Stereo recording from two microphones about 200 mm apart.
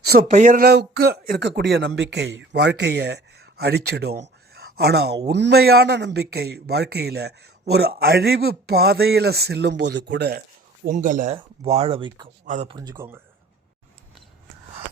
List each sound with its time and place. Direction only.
0.0 s a sound: 50° right (ahead or behind)
0.3 s speech: 35° right (ahead or behind); by 10.4 s 55° right (ahead or behind)
10.8 s speech: 40° right (ahead or behind); by 12.3 s 25° right (ahead or behind)
12.5 s speech: 35° right (ahead or behind)
12.7 s speech: 20° right (ahead or behind)